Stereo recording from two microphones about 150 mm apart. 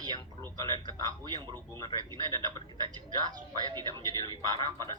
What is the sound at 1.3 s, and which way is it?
Speech, 30° right (ahead or behind).